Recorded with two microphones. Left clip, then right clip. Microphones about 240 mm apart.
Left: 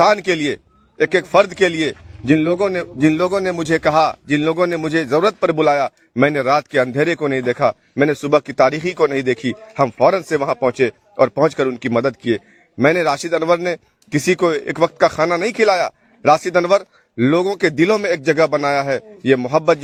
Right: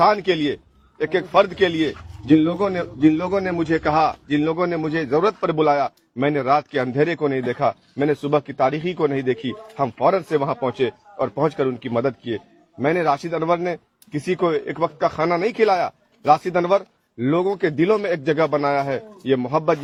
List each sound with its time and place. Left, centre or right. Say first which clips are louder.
0.0 s a man's voice: left 3 dB; left